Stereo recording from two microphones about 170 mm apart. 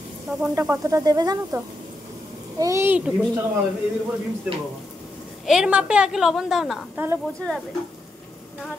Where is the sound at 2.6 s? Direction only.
15° right (ahead or behind).